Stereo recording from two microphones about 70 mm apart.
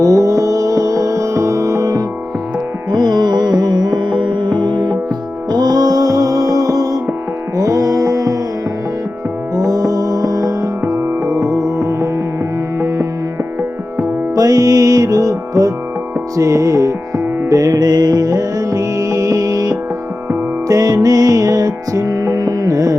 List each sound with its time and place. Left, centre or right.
0.0 s music: right
2.9 s music: right
5.5 s music: right
9.6 s music: right
14.0 s music: right